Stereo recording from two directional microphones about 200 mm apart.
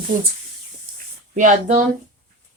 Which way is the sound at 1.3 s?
40° right (ahead or behind).